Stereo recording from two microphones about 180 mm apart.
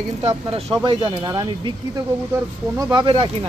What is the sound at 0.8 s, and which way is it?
Speech, 25° right (ahead or behind).